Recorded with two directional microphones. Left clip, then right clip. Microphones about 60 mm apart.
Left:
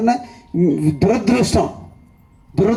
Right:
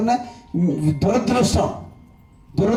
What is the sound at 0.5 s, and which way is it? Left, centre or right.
Speech, left.